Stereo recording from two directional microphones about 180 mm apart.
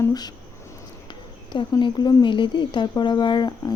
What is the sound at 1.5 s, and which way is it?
Speech, 25° left (ahead or behind).